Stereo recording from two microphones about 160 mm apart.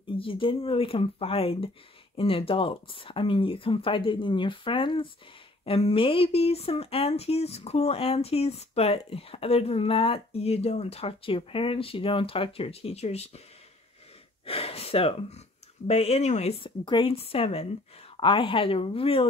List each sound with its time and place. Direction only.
0.2 s speech: 35° left (ahead or behind)
14.4 s speech: 35° left (ahead or behind)